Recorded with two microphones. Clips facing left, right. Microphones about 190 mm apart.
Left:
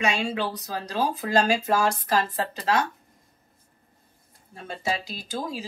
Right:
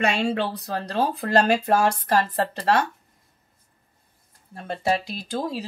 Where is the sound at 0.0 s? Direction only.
60° right (ahead or behind).